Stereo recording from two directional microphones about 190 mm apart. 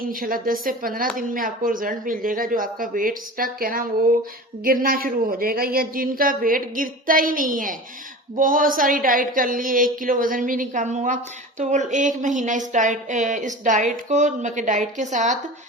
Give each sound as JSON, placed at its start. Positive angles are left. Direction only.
{"t": 0.1, "sound": "a woman's voice", "side_deg": -50}